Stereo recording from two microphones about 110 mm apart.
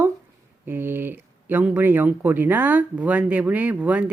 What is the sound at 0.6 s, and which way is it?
Speech, 20° right (ahead or behind).